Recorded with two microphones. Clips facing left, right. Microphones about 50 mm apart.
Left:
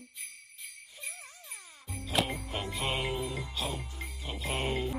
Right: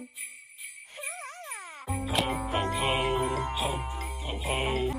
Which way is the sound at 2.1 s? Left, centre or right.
Centre.